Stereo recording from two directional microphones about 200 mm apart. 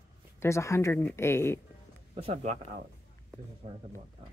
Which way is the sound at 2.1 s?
30° right (ahead or behind).